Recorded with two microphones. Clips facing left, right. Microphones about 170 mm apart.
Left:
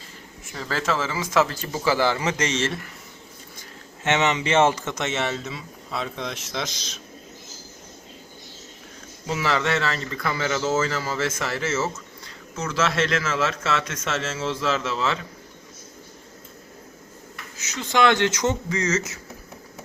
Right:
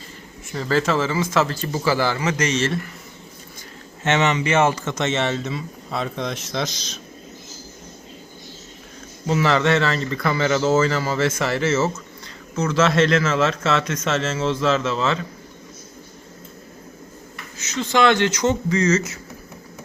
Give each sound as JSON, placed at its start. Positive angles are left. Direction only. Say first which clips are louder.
{"t": 0.5, "sound": "speech", "louder": "right 6 dB", "side_deg": 0}
{"t": 4.0, "sound": "speech", "louder": "right 2 dB", "side_deg": 20}
{"t": 4.9, "sound": "a man's voice", "louder": "right 4 dB", "side_deg": 10}
{"t": 9.4, "sound": "a man's voice", "louder": "right 5 dB", "side_deg": 5}
{"t": 17.6, "sound": "speech", "louder": "right 2 dB", "side_deg": 15}